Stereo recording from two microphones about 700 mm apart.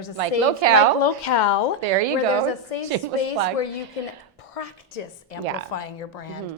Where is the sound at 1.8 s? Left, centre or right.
Right.